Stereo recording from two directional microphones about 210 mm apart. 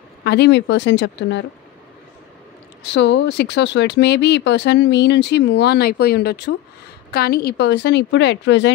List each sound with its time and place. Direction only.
0.2 s speech: 55° left (ahead or behind)
2.9 s speech: 60° left (ahead or behind)